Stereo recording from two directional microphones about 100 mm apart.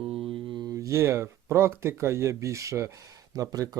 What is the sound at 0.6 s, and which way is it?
Speech, 30° right (ahead or behind).